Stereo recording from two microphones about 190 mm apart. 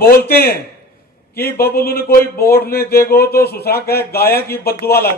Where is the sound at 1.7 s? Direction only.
50° left (ahead or behind).